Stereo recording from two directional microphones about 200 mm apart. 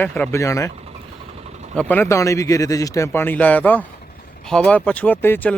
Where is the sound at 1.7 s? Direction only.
10° left (ahead or behind).